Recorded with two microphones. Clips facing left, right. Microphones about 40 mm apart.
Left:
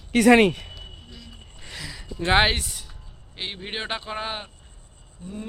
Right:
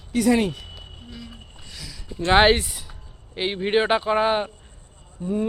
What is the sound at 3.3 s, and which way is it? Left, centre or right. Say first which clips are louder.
Speech: right 11 dB; centre.